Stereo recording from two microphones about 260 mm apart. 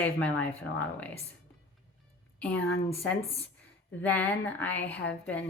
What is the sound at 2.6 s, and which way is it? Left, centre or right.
Speech, left.